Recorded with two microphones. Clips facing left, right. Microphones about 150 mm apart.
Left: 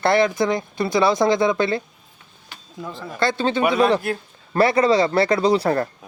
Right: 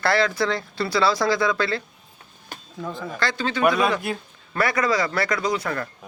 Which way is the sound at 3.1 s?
25° left (ahead or behind).